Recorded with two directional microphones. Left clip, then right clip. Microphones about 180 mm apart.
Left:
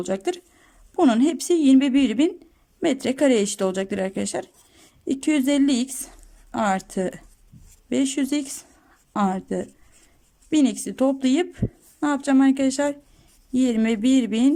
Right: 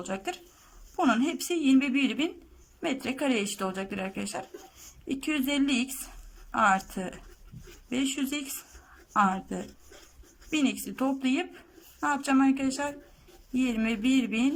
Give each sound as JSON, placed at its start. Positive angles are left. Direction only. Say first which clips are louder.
{"t": 0.1, "sound": "speech", "louder": "left 7 dB", "side_deg": 40}